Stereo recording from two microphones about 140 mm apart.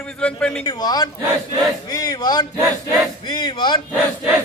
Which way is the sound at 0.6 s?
30° left (ahead or behind).